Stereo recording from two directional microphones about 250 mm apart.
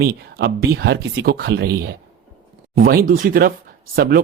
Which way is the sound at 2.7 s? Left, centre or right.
Right.